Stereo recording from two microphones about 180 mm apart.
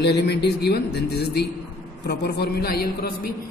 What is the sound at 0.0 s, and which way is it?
Speech, 65° left (ahead or behind).